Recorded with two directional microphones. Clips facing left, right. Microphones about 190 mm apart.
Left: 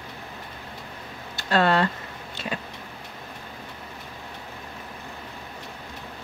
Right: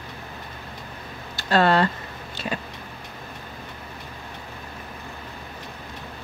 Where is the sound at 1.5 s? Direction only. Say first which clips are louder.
Right 2 dB; 35° right (ahead or behind).